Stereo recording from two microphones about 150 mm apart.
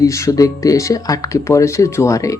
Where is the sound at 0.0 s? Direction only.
20° left (ahead or behind).